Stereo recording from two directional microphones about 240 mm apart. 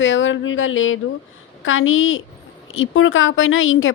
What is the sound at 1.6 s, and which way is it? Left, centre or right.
Speech, left.